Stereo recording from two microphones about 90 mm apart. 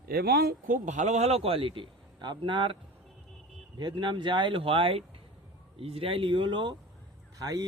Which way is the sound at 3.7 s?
60° right (ahead or behind).